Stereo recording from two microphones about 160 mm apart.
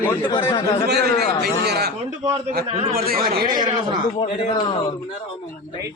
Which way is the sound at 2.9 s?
65° right (ahead or behind).